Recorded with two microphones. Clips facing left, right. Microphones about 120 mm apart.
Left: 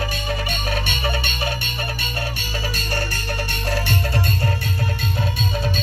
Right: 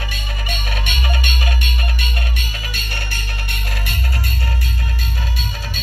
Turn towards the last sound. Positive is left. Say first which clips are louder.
# left 5 dB
turn(degrees=30)  # may be behind; listen again after turning